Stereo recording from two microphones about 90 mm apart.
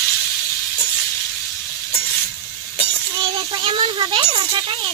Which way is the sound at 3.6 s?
75° right (ahead or behind).